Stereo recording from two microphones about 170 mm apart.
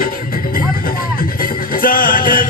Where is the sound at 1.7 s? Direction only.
55° left (ahead or behind).